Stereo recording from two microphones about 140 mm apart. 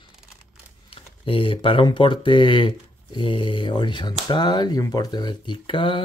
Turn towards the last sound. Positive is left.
turn(degrees=35)  # may be behind; listen again after turning